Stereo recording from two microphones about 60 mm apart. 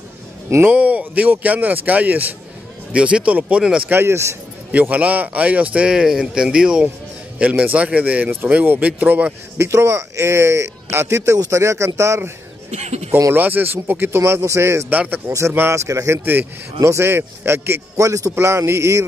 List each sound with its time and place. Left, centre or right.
0.7 s speech: right
2.9 s speech: centre
3.9 s speech: right
4.7 s speech: right
9.6 s speech: right
13.3 s speech: right
14.2 s speech: right
14.9 s speech: right
15.2 s speech: right
16.8 s speech: right
17.9 s speech: right
18.3 s speech: right